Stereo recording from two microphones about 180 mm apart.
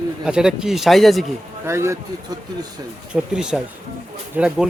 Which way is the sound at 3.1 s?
5° right (ahead or behind).